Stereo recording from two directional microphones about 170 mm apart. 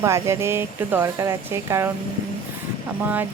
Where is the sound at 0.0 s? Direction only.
15° right (ahead or behind).